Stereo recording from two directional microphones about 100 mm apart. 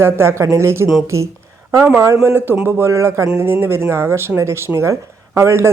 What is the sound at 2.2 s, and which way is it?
Speech, 20° right (ahead or behind).